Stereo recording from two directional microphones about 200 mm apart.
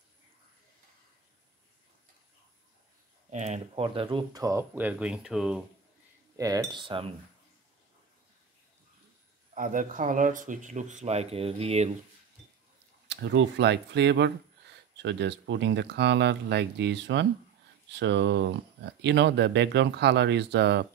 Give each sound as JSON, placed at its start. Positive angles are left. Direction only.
{"t": 3.3, "sound": "speech", "side_deg": -35}
{"t": 6.3, "sound": "cutlery", "side_deg": -15}
{"t": 9.5, "sound": "speech", "side_deg": -40}
{"t": 13.1, "sound": "speech", "side_deg": -60}